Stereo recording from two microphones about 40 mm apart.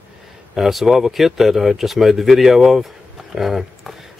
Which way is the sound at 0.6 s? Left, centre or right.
Centre.